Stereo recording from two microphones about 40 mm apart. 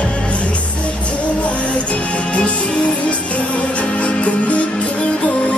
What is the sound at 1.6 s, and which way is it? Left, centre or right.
Music, left.